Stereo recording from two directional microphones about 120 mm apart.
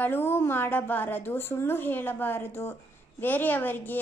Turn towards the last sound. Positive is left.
turn(degrees=15)  # may be behind; listen again after turning